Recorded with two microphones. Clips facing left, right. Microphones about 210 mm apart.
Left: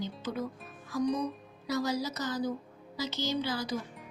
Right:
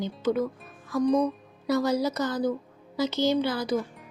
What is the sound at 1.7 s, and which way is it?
A woman's voice, 55° right (ahead or behind).